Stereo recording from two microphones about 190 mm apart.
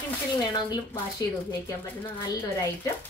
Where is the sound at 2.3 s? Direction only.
20° left (ahead or behind).